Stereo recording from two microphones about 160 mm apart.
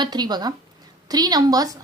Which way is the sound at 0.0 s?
25° right (ahead or behind).